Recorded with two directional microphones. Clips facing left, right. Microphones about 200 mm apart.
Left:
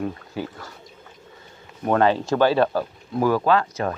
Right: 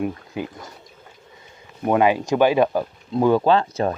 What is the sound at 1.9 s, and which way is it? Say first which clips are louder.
Speech: right 1 dB; 10° right (ahead or behind).